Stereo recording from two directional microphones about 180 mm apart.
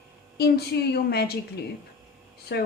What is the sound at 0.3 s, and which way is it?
Speech, 60° left (ahead or behind).